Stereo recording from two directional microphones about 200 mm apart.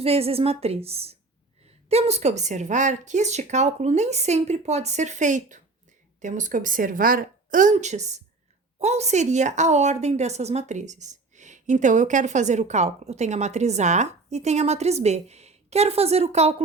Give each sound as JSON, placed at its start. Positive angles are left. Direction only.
{"t": 0.0, "sound": "a woman's voice", "side_deg": -30}